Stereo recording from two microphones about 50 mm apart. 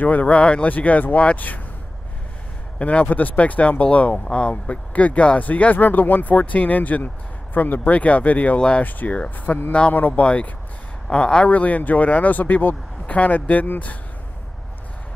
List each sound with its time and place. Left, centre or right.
0.0 s speech: left
2.8 s speech: left
8.5 s speech: centre
8.8 s speech: left
9.7 s speech: left
9.9 s speech: left
10.2 s speech: left
11.4 s speech: left